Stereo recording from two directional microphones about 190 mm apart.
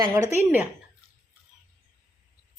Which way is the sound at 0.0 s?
20° right (ahead or behind).